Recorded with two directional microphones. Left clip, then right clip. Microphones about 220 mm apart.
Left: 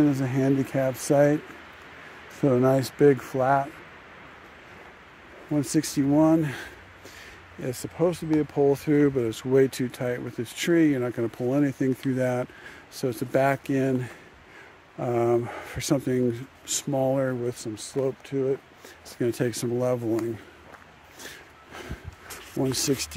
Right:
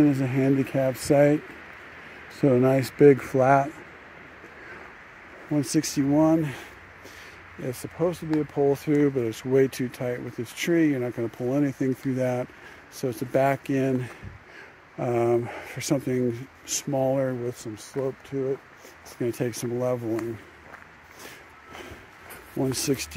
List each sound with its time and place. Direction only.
0.0 s speech: 5° right (ahead or behind)
2.4 s speech: centre (ahead or behind)
3.0 s speech: 20° right (ahead or behind)
5.5 s speech: centre (ahead or behind)
7.6 s speech: 10° left (ahead or behind)
22.6 s speech: centre (ahead or behind)